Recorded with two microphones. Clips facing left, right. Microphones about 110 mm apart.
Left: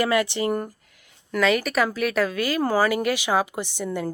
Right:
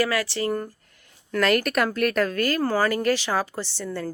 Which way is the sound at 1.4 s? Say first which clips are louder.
Even; centre (ahead or behind).